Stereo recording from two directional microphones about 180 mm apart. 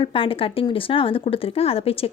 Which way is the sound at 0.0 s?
30° left (ahead or behind).